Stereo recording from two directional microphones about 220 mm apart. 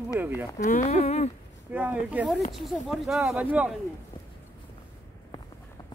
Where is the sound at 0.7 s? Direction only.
30° left (ahead or behind).